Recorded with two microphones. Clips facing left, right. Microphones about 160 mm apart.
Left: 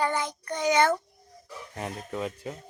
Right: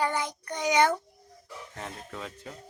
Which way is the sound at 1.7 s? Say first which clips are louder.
Left 7 dB; 15° left (ahead or behind).